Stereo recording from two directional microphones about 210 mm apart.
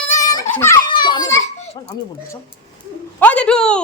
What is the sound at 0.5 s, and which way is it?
Children playing, 15° left (ahead or behind).